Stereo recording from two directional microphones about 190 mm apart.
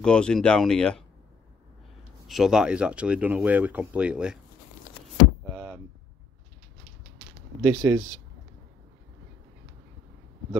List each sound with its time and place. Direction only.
0.0 s speech: 5° left (ahead or behind)
2.2 s speech: centre (ahead or behind)
5.5 s hum: 15° right (ahead or behind)
7.6 s speech: 15° right (ahead or behind)